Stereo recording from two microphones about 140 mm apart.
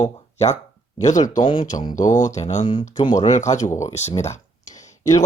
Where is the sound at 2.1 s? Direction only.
60° left (ahead or behind).